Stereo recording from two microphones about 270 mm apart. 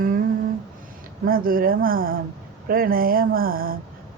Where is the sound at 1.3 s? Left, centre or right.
Right.